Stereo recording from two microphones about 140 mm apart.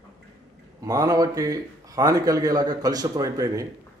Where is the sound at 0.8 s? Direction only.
25° right (ahead or behind).